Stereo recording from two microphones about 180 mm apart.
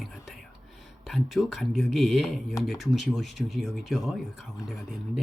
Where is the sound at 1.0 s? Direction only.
Centre (ahead or behind).